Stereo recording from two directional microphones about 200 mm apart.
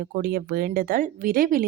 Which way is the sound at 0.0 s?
50° right (ahead or behind).